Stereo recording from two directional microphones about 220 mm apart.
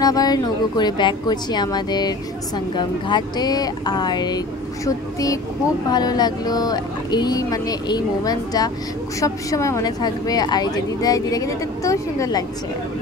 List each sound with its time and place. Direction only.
0.0 s speech: 15° left (ahead or behind)